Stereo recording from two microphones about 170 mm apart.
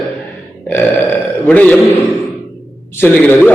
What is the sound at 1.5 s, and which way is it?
Speech, 10° left (ahead or behind).